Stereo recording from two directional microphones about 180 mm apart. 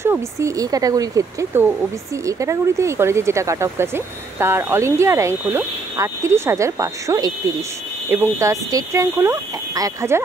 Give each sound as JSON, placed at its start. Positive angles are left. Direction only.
{"t": 0.0, "sound": "speech", "side_deg": -15}